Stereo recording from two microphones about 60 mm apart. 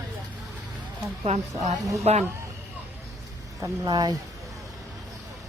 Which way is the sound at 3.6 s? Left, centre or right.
Right.